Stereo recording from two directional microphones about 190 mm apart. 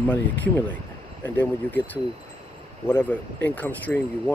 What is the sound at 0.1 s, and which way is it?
Speech, 10° left (ahead or behind).